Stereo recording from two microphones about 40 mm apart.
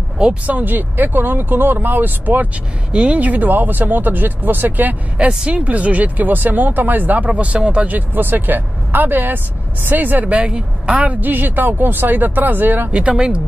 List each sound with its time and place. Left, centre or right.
0.5 s speech: right
2.9 s speech: right
5.4 s speech: right
7.2 s a woman's voice: right
7.8 s speech: right
10.3 s a woman's voice: right
11.1 s speech: right
13.1 s speech: right